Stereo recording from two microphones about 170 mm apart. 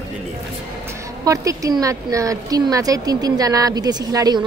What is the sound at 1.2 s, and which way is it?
A woman's voice, 20° right (ahead or behind).